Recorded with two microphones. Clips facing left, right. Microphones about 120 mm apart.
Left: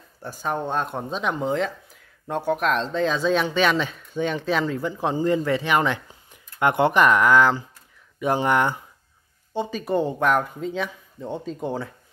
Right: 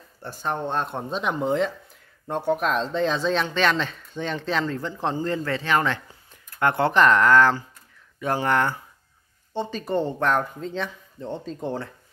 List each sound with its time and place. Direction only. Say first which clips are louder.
0.2 s speech: left 1 dB; 5° left (ahead or behind)